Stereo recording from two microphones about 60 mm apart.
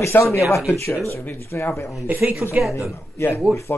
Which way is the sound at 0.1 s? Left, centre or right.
Left.